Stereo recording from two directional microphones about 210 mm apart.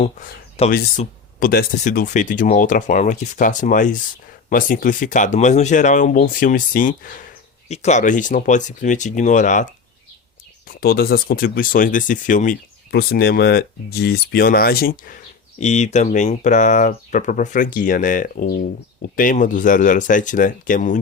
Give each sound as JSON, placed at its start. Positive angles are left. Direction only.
{"t": 0.0, "sound": "speech", "side_deg": 35}
{"t": 10.7, "sound": "speech", "side_deg": 45}